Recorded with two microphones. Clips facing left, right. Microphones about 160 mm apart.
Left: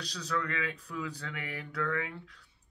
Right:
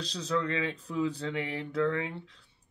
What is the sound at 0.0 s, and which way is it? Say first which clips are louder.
Speech: right 4 dB; 25° right (ahead or behind).